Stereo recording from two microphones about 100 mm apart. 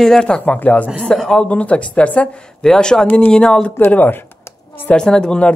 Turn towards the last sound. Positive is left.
turn(degrees=10)  # may be behind; listen again after turning